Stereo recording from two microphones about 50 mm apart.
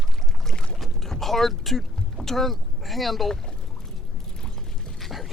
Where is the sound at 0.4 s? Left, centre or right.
Centre.